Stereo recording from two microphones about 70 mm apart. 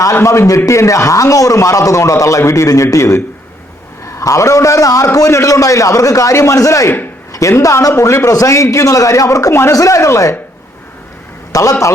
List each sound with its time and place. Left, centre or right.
0.0 s a man's voice: left
9.5 s a man's voice: left
9.7 s a man's voice: left
11.5 s a man's voice: left